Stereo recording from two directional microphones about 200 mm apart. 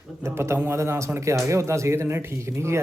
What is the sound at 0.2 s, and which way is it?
A man's voice, 15° right (ahead or behind).